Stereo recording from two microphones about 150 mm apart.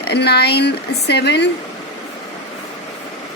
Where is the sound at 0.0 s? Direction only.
90° left.